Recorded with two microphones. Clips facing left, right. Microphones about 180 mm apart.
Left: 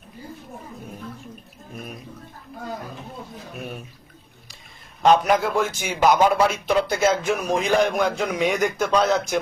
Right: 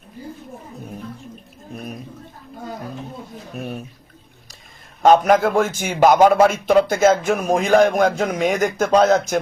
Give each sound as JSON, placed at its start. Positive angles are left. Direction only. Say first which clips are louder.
{"t": 5.0, "sound": "a man's voice", "louder": "right 4 dB", "side_deg": -45}